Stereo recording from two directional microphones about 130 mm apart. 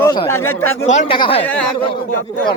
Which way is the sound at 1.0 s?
40° left (ahead or behind).